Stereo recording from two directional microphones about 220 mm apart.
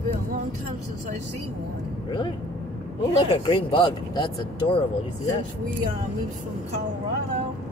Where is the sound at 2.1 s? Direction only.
20° left (ahead or behind).